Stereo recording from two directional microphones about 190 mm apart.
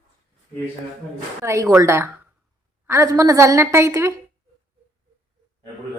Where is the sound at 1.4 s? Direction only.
15° right (ahead or behind).